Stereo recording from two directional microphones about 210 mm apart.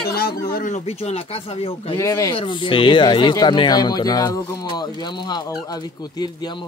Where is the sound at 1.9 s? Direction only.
15° left (ahead or behind).